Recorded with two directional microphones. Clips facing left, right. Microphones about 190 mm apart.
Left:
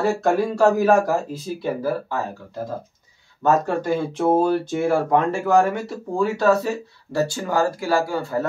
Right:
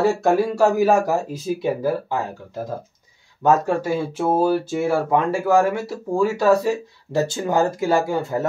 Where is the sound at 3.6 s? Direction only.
5° right (ahead or behind).